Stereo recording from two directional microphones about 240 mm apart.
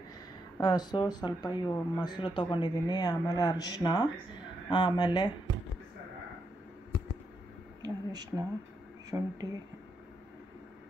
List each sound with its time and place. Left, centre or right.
0.6 s speech: centre
7.8 s a sound: centre
9.1 s speech: centre